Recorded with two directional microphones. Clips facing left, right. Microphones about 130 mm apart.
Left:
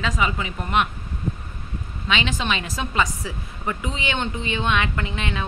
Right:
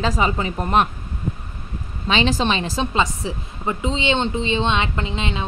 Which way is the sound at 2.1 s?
35° right (ahead or behind).